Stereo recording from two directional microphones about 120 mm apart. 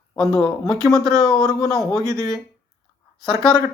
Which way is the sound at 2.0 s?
30° right (ahead or behind).